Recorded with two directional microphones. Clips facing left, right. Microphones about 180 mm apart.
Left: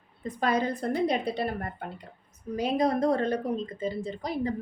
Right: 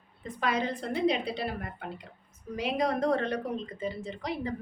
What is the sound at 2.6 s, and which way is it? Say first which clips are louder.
A woman's voice: left 3 dB; 35° left (ahead or behind).